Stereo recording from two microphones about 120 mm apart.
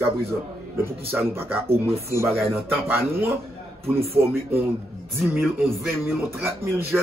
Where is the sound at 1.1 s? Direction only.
20° right (ahead or behind).